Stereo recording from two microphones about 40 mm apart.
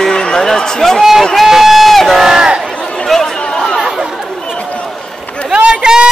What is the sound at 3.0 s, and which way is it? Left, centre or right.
Chatter, centre.